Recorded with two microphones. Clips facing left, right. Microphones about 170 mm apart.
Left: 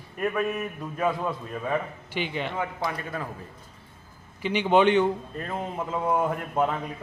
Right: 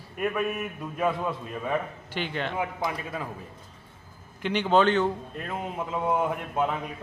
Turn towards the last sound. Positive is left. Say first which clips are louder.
# left 2 dB
turn(degrees=0)  # may be behind; listen again after turning